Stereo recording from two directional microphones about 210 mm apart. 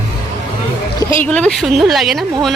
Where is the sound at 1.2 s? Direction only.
5° left (ahead or behind).